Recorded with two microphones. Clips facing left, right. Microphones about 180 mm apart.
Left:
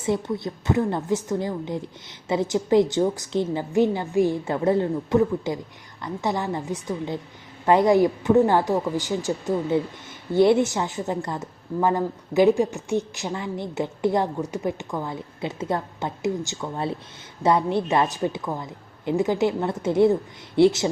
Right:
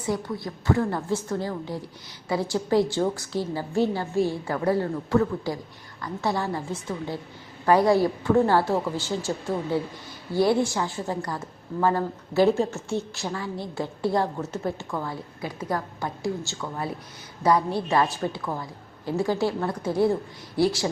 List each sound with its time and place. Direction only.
0.0 s a woman's voice: 25° left (ahead or behind)